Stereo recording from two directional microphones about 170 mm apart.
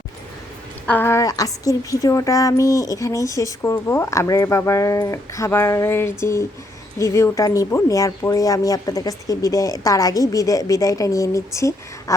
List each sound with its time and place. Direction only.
0.9 s a woman's voice: 10° left (ahead or behind)